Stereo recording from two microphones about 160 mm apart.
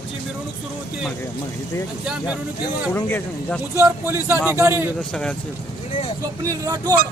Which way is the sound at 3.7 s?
15° right (ahead or behind).